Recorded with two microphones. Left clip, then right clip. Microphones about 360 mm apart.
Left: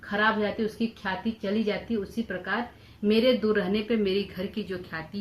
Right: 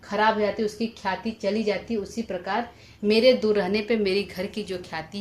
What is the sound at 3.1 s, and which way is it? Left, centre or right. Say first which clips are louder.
A woman's voice: right 4 dB; centre.